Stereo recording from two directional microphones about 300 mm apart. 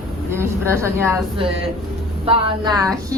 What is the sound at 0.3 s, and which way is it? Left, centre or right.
Speech, centre.